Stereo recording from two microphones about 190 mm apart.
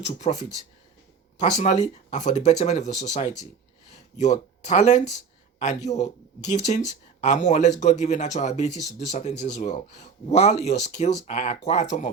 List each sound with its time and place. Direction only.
0.0 s speech: 40° left (ahead or behind)
1.4 s speech: 40° left (ahead or behind)